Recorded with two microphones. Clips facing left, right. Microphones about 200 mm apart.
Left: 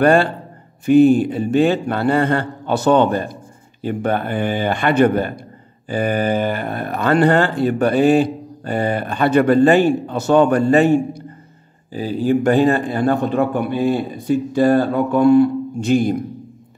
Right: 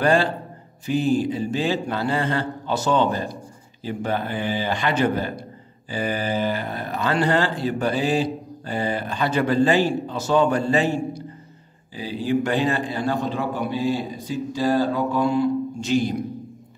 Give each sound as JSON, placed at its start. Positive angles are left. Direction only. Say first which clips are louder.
{"t": 0.0, "sound": "speech", "louder": "left 5 dB", "side_deg": 55}